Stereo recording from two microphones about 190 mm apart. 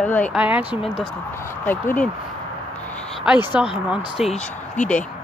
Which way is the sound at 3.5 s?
5° right (ahead or behind).